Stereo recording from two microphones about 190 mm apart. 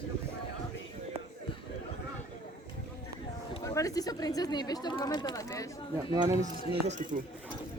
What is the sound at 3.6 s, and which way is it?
Speech, 20° left (ahead or behind).